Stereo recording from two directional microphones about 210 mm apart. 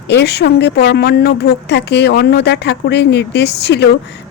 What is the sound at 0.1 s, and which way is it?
Speech, 55° left (ahead or behind).